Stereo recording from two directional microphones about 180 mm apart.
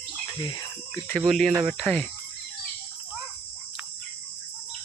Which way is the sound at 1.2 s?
Centre (ahead or behind).